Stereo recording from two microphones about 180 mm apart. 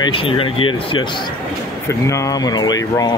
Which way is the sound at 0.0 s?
30° left (ahead or behind).